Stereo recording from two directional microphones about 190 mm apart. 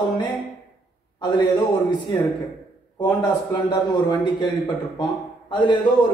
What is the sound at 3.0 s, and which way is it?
A man's voice, 20° left (ahead or behind).